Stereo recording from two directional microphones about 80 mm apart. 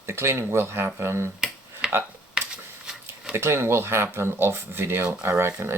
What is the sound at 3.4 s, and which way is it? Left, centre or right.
Speech, right.